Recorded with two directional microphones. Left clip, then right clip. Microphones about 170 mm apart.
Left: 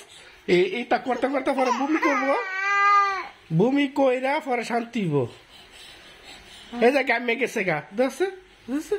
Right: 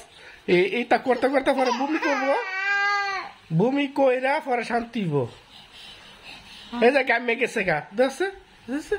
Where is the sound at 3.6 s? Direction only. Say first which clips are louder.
Even; 10° left (ahead or behind).